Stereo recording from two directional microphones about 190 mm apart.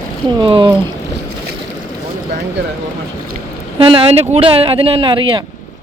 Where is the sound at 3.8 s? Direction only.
30° right (ahead or behind).